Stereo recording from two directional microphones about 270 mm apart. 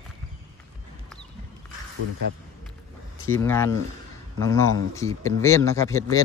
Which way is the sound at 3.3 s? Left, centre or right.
Centre.